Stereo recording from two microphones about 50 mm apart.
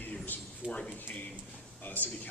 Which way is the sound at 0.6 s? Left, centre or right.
Right.